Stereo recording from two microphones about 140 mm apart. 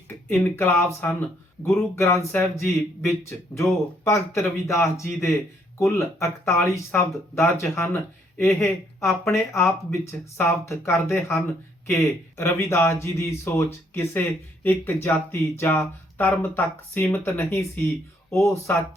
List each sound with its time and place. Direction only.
0.3 s speech: 15° left (ahead or behind)